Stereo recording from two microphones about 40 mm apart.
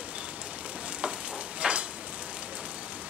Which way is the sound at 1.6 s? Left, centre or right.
Right.